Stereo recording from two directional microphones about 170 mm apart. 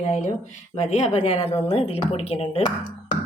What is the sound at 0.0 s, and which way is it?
A woman's voice, 45° left (ahead or behind).